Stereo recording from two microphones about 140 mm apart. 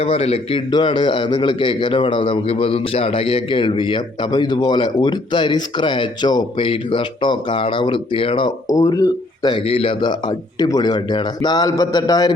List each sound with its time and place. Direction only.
0.0 s a man's voice: 45° left (ahead or behind)
0.7 s a man's voice: 35° left (ahead or behind)
8.7 s speech: 25° left (ahead or behind)
9.6 s speech: 40° left (ahead or behind)